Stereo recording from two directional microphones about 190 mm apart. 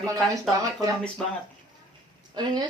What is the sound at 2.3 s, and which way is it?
Speech, 20° right (ahead or behind).